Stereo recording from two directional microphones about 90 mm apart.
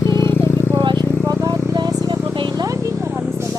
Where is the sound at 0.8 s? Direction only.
60° right (ahead or behind).